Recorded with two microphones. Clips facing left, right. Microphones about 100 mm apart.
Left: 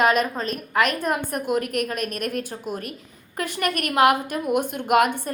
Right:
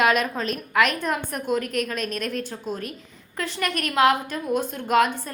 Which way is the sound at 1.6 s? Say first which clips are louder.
Left 1 dB; 50° left (ahead or behind).